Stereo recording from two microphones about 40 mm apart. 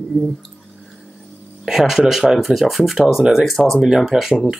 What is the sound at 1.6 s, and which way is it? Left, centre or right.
Speech, centre.